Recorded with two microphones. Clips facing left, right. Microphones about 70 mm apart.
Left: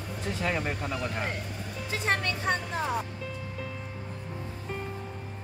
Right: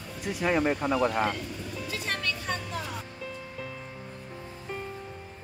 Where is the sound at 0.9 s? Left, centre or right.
Right.